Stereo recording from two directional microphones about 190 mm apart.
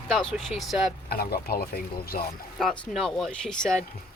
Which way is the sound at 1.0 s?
55° left (ahead or behind).